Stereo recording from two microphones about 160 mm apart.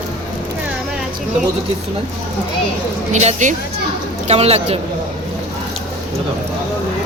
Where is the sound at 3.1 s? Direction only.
45° right (ahead or behind).